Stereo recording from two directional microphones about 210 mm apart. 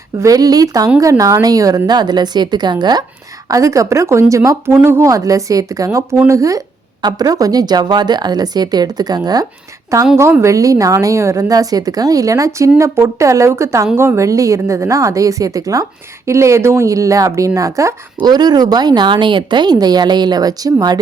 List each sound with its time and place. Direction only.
0.2 s a woman's voice: 15° right (ahead or behind)